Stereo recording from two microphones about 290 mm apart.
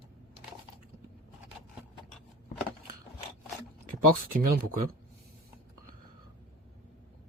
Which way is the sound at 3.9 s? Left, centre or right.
Right.